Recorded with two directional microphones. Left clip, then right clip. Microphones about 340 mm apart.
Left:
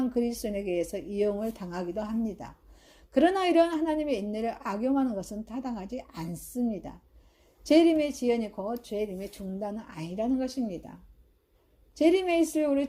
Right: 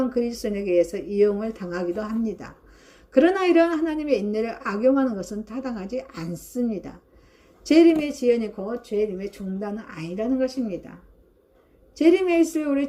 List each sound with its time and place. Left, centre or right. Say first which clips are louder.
0.0 s a woman's voice: right 5 dB; left
11.9 s a woman's voice: right 5 dB; left